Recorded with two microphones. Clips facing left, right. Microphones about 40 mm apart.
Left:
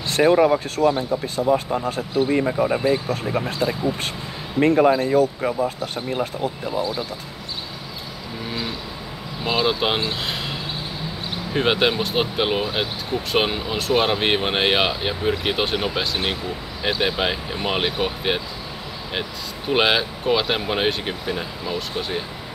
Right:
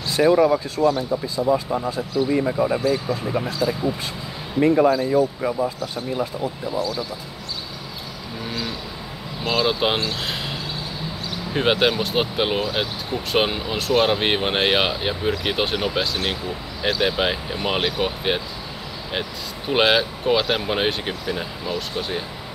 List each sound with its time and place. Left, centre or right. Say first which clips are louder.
0.1 s speech: even; left
2.6 s speech: left 1 dB; left
3.1 s speech: even; left
4.6 s speech: even; left
4.8 s speech: left 1 dB; left
5.1 s speech: left 1 dB; left
6.8 s speech: left 1 dB; left
8.5 s vehicle: even; centre
9.7 s speech: right 1 dB; centre
10.2 s a sound: even; centre
11.5 s speech: even; centre
19.7 s speech: right 1 dB; centre